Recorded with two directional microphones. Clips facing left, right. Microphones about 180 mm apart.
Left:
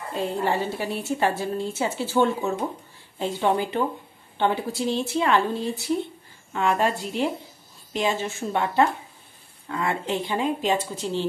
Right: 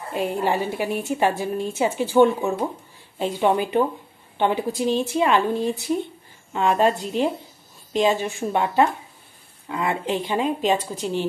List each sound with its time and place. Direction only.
0.1 s a woman's voice: 15° right (ahead or behind)